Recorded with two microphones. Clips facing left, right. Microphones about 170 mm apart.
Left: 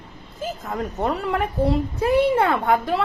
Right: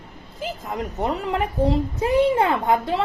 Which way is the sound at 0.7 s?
20° right (ahead or behind).